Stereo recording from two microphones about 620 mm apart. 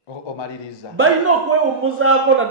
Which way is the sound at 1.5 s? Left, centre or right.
Right.